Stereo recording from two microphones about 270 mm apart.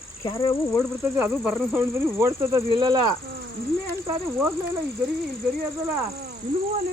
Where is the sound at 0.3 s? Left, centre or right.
Centre.